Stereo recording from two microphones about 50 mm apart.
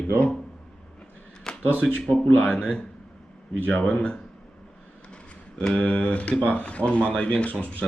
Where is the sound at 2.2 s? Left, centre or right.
Left.